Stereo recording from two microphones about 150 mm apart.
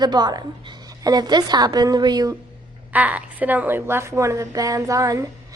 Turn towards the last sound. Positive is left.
turn(degrees=-20)  # may be behind; listen again after turning